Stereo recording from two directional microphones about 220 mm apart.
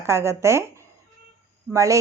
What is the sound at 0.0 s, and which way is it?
A woman's voice, 10° right (ahead or behind).